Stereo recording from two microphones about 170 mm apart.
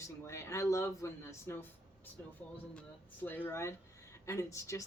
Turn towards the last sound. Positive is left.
turn(degrees=15)  # may be behind; listen again after turning